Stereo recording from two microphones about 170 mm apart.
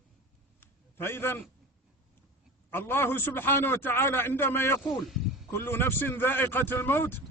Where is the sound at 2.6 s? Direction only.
10° left (ahead or behind).